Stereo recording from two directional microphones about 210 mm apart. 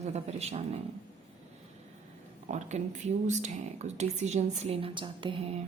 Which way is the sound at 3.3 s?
35° right (ahead or behind).